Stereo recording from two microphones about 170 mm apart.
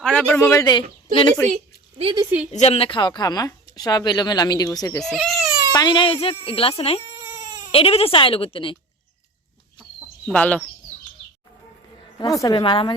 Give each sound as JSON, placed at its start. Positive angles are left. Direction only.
{"t": 0.0, "sound": "a man's voice", "side_deg": 5}
{"t": 1.5, "sound": "a sound", "side_deg": -35}
{"t": 2.5, "sound": "speech", "side_deg": 40}
{"t": 5.0, "sound": "baby cry", "side_deg": 0}
{"t": 5.7, "sound": "speech", "side_deg": 25}
{"t": 7.3, "sound": "crying", "side_deg": -20}
{"t": 7.7, "sound": "speech", "side_deg": 35}
{"t": 10.2, "sound": "a man's voice", "side_deg": 5}
{"t": 12.2, "sound": "speech", "side_deg": 20}